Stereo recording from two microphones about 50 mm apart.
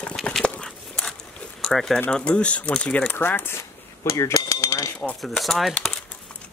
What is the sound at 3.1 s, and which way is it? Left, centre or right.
Speech, left.